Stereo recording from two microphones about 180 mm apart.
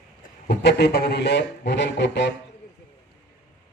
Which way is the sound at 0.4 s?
70° left (ahead or behind).